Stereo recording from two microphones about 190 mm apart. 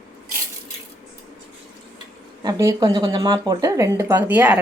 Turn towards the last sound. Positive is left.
turn(degrees=-10)  # may be behind; listen again after turning